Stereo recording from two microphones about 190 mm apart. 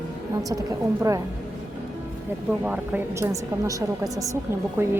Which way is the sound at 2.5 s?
5° right (ahead or behind).